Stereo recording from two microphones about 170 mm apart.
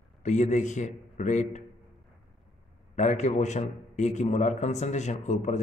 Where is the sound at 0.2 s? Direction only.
45° left (ahead or behind).